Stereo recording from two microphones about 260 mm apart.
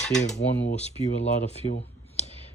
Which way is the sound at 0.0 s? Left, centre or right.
Centre.